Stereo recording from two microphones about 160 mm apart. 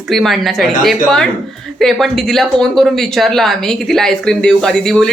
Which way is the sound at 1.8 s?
Centre (ahead or behind).